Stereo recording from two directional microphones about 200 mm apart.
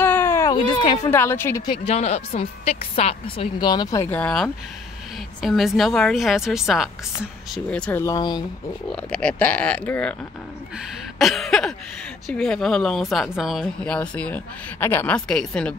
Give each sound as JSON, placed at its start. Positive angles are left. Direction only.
{"t": 0.0, "sound": "a sound", "side_deg": 10}
{"t": 0.6, "sound": "a woman's voice", "side_deg": 25}
{"t": 1.1, "sound": "speech", "side_deg": 10}
{"t": 1.7, "sound": "a woman's voice", "side_deg": 30}
{"t": 9.1, "sound": "speech", "side_deg": 5}
{"t": 11.1, "sound": "a sound", "side_deg": 0}
{"t": 12.3, "sound": "speech", "side_deg": 0}